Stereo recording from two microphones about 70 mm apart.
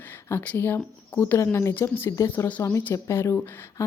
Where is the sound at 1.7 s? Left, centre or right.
Left.